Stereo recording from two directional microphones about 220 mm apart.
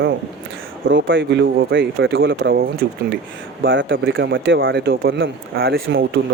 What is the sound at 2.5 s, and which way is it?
Speech, 40° right (ahead or behind).